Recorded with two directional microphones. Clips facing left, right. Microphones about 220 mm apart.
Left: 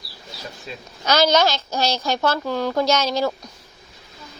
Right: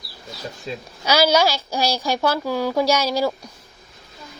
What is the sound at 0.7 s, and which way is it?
Speech, 30° right (ahead or behind).